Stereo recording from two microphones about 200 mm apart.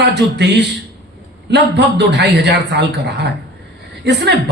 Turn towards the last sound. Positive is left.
turn(degrees=-60)  # may be behind; listen again after turning